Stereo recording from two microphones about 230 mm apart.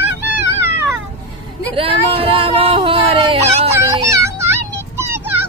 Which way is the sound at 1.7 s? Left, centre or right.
Right.